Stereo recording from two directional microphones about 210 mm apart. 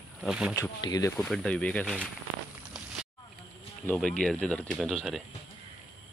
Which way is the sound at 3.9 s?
5° left (ahead or behind).